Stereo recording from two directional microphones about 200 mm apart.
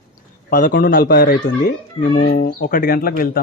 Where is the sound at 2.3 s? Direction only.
45° left (ahead or behind).